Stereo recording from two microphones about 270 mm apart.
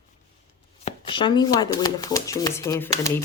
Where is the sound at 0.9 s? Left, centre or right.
Centre.